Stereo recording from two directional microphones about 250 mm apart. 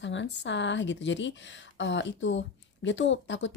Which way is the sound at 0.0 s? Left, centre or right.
Left.